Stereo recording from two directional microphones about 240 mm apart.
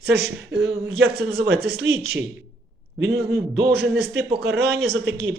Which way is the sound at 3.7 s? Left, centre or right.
Right.